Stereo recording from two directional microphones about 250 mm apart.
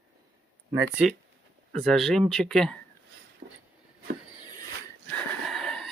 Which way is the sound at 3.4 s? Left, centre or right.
Right.